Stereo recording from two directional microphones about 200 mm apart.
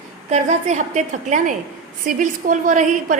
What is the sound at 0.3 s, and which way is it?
A woman's voice, 35° right (ahead or behind).